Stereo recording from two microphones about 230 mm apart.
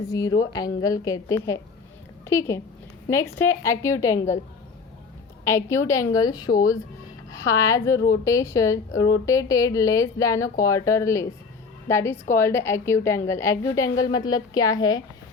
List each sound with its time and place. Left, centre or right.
0.1 s a woman's voice: centre
5.5 s a woman's voice: centre